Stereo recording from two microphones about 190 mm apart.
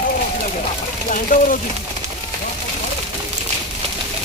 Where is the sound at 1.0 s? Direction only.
45° left (ahead or behind).